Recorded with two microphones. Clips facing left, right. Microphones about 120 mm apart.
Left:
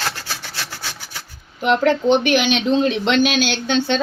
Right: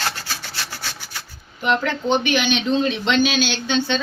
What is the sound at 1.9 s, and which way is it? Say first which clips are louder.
Speech: left 5 dB; 80° left.